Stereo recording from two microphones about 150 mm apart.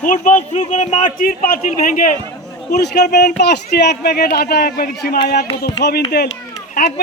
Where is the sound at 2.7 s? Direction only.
90° left.